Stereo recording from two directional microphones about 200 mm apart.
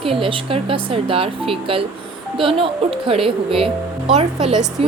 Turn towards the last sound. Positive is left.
turn(degrees=-30)  # may be behind; listen again after turning